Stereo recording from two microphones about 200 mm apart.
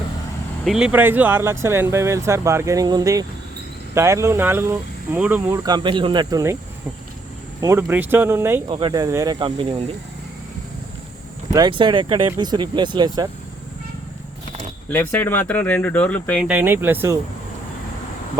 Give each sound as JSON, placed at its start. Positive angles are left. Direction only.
{"t": 0.6, "sound": "speech", "side_deg": -5}
{"t": 7.6, "sound": "speech", "side_deg": -15}
{"t": 8.6, "sound": "speech", "side_deg": -25}
{"t": 11.5, "sound": "speech", "side_deg": -25}
{"t": 14.8, "sound": "speech", "side_deg": 10}
{"t": 16.5, "sound": "speech", "side_deg": -10}